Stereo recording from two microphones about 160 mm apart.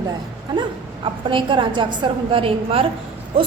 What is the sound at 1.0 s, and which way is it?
A woman's voice, 30° right (ahead or behind).